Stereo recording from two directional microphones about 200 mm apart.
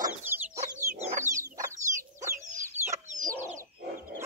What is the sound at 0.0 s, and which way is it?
Chicken, 10° right (ahead or behind).